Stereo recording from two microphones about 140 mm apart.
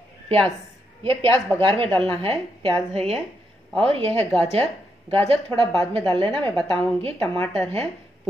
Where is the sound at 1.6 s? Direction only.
40° right (ahead or behind).